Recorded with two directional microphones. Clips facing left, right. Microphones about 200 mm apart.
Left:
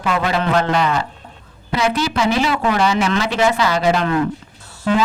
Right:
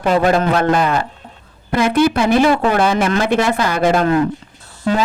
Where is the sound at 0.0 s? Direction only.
40° right (ahead or behind).